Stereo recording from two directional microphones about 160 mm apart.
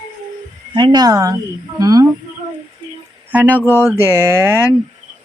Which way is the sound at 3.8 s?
15° right (ahead or behind).